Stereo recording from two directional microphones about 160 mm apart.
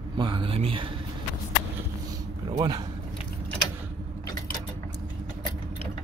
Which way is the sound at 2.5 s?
25° right (ahead or behind).